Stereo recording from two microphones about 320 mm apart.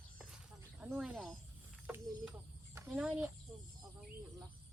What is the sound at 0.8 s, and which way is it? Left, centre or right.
Speech, centre.